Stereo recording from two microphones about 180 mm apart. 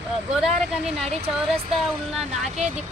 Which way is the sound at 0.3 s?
Centre (ahead or behind).